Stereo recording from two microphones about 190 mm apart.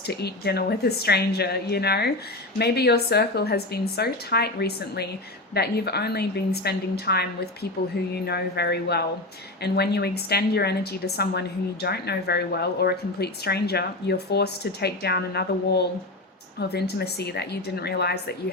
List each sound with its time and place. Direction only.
0.1 s a woman's voice: 60° left (ahead or behind)